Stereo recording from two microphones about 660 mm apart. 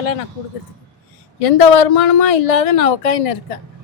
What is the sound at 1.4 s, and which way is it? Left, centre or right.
A woman's voice, left.